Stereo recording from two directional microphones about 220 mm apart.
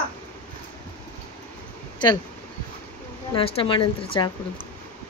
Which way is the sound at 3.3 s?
25° left (ahead or behind).